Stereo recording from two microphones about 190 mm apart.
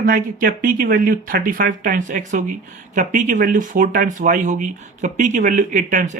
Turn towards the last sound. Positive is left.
turn(degrees=-40)  # may be behind; listen again after turning